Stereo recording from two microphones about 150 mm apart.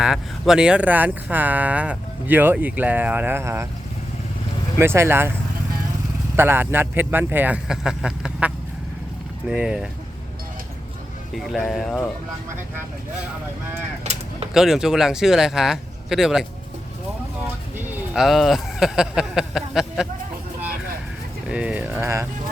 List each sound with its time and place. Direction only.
0.0 s speech: 5° right (ahead or behind)
4.8 s speech: 15° right (ahead or behind)
6.3 s speech: 15° right (ahead or behind)
11.3 s speech: centre (ahead or behind)
14.0 s a sound: 45° right (ahead or behind)
14.5 s speech: 5° right (ahead or behind)
17.7 s speech: 5° right (ahead or behind)
21.5 s speech: 10° right (ahead or behind)